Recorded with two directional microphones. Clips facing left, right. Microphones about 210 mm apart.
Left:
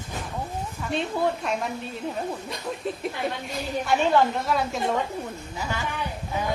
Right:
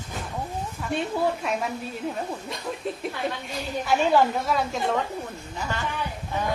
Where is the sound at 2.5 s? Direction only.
Centre (ahead or behind).